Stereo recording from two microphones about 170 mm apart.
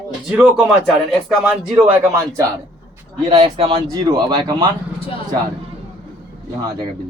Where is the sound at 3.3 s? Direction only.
35° right (ahead or behind).